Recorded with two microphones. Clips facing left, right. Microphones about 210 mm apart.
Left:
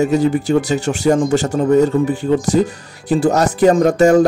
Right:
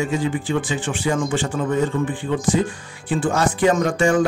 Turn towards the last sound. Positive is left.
turn(degrees=40)  # may be behind; listen again after turning